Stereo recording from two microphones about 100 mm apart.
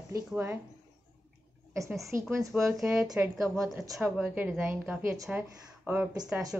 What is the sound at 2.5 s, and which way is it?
A woman's voice, centre (ahead or behind).